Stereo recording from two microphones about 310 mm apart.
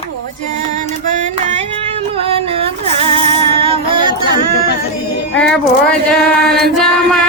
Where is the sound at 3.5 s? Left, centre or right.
Centre.